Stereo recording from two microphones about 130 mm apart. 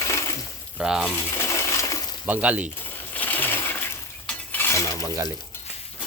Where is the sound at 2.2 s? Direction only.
10° right (ahead or behind).